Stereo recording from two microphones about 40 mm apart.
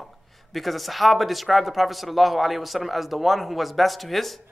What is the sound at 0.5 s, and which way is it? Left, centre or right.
A man's voice, centre.